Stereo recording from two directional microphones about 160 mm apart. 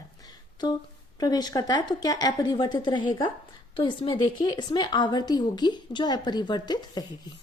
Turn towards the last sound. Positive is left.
turn(degrees=25)  # may be behind; listen again after turning